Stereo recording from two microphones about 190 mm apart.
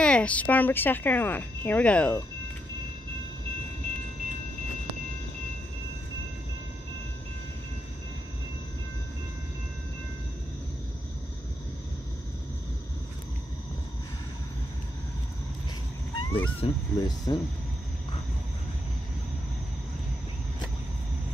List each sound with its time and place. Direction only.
0.0 s speech: 5° left (ahead or behind)
16.2 s cat: 20° left (ahead or behind)
16.5 s speech: 25° left (ahead or behind)